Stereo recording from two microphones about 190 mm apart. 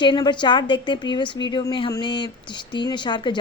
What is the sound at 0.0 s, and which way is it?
A woman's voice, 25° left (ahead or behind).